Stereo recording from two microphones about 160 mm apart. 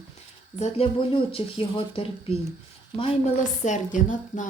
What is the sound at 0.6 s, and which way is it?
Speech, 35° left (ahead or behind).